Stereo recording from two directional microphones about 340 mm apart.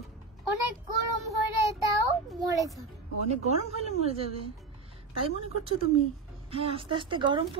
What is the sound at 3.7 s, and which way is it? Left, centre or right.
Speech, centre.